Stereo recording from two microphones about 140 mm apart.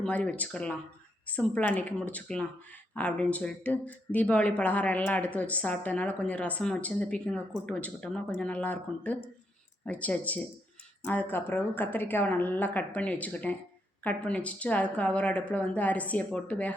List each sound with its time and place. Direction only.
0.0 s speech: 10° left (ahead or behind)